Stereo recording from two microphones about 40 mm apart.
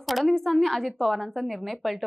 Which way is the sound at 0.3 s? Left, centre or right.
Centre.